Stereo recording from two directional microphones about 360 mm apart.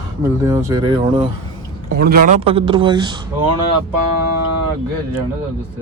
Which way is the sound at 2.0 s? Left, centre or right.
Right.